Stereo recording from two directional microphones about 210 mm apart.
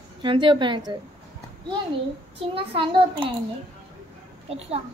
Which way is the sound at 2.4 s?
25° right (ahead or behind).